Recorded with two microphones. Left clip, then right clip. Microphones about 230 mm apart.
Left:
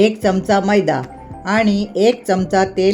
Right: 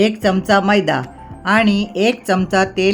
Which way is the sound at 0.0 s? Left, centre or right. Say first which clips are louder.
Left 1 dB; centre.